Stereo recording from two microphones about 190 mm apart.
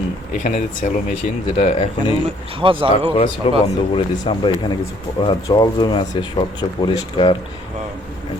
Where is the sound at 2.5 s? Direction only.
25° right (ahead or behind).